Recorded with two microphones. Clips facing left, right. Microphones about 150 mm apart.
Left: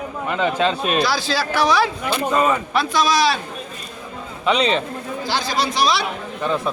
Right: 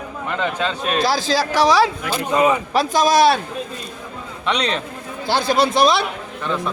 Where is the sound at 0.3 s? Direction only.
10° left (ahead or behind).